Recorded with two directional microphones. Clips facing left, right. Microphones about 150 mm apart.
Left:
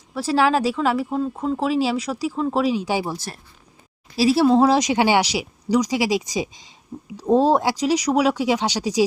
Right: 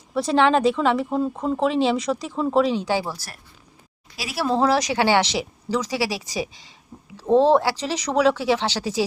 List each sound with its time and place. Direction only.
0.1 s speech: 5° left (ahead or behind)
4.2 s speech: 30° left (ahead or behind)
4.5 s speech: 20° left (ahead or behind)